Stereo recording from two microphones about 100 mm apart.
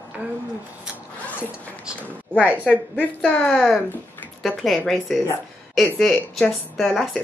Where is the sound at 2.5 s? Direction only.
15° left (ahead or behind).